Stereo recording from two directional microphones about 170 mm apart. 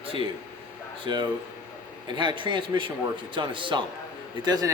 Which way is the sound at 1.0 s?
30° right (ahead or behind).